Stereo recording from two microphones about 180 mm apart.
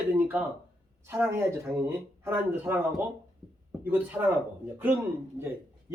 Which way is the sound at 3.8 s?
10° right (ahead or behind).